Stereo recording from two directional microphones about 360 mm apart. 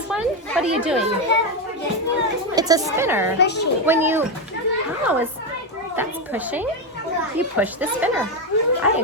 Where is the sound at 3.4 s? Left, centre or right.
Left.